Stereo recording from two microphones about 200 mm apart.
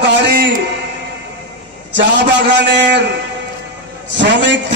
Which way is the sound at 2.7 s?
60° right (ahead or behind).